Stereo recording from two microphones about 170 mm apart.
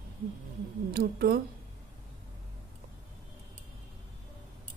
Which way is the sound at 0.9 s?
65° right (ahead or behind).